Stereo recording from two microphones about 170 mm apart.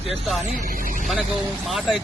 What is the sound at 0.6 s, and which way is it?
Speech, 55° right (ahead or behind).